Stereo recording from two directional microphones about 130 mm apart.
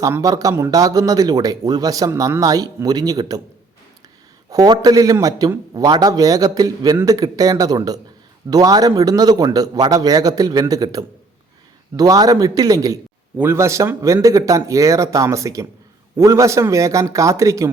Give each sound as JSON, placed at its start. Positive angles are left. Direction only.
{"t": 0.0, "sound": "a man's voice", "side_deg": -25}
{"t": 4.5, "sound": "a man's voice", "side_deg": -30}